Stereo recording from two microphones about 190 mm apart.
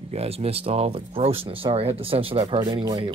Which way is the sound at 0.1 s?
30° right (ahead or behind).